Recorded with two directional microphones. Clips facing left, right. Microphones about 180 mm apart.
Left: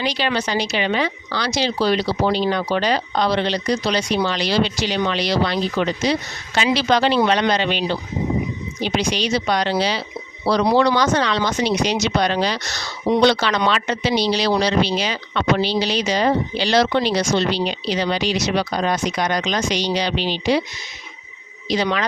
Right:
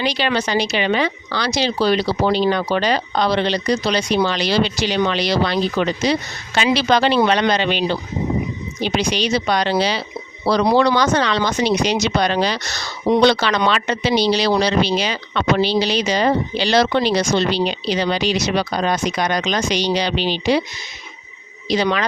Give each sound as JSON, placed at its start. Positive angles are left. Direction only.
{"t": 0.0, "sound": "speech", "side_deg": -70}
{"t": 6.6, "sound": "speech", "side_deg": -70}
{"t": 21.8, "sound": "speech", "side_deg": -70}